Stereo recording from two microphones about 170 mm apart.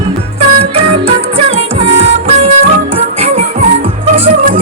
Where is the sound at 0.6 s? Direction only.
35° right (ahead or behind).